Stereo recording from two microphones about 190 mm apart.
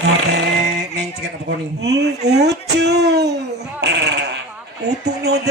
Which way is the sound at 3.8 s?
65° right (ahead or behind).